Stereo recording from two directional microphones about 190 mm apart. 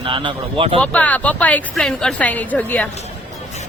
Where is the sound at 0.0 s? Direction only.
25° right (ahead or behind).